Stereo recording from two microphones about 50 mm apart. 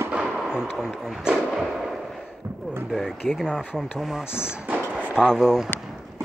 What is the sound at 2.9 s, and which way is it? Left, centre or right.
Speech, centre.